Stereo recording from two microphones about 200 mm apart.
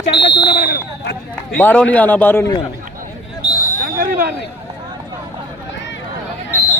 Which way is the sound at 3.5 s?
45° left (ahead or behind).